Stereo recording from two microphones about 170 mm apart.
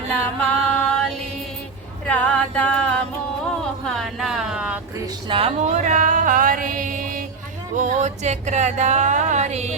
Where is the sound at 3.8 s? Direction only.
Centre (ahead or behind).